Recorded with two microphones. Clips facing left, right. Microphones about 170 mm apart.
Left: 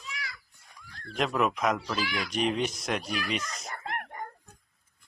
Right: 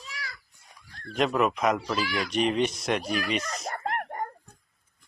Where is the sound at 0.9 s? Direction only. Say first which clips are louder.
Right 3 dB; 30° right (ahead or behind).